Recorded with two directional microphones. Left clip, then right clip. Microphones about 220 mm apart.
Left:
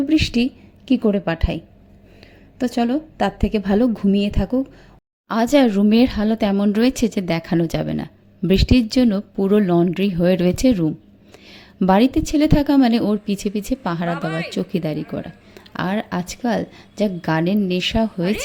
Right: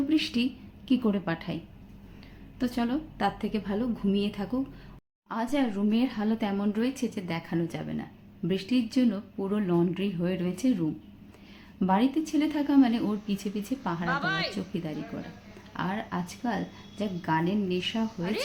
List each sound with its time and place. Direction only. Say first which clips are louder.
0.1 s a woman's voice: left 9 dB; 35° left (ahead or behind)
2.6 s a woman's voice: left 10 dB; 35° left (ahead or behind)
5.3 s a woman's voice: left 13 dB; 45° left (ahead or behind)
14.1 s a woman's voice: left 4 dB; 10° left (ahead or behind)
14.5 s a woman's voice: left 12 dB; 45° left (ahead or behind)